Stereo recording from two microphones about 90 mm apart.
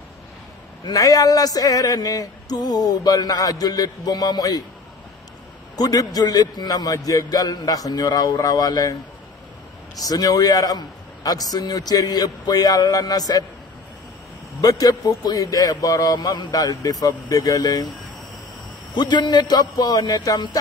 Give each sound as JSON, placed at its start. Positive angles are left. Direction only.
{"t": 0.8, "sound": "speech", "side_deg": 40}
{"t": 5.8, "sound": "speech", "side_deg": 45}
{"t": 9.9, "sound": "speech", "side_deg": 45}
{"t": 14.6, "sound": "speech", "side_deg": 45}
{"t": 18.9, "sound": "speech", "side_deg": 55}